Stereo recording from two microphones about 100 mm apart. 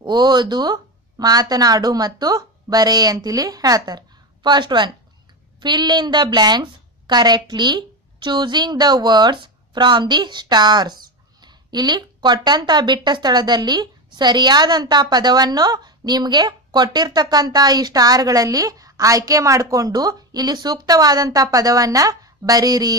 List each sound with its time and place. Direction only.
0.0 s a woman's voice: 45° right (ahead or behind)